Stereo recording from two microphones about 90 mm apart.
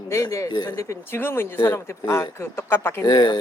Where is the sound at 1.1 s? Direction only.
25° left (ahead or behind).